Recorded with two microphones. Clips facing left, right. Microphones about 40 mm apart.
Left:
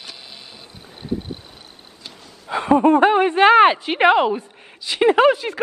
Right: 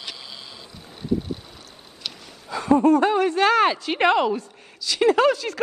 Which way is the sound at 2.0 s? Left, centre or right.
Right.